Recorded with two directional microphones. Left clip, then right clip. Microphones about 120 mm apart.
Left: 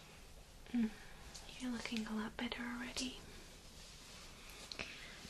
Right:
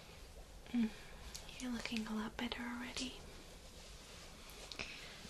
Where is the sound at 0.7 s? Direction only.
10° right (ahead or behind).